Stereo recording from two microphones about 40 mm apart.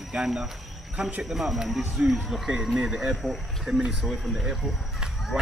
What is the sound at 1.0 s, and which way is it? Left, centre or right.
Speech, right.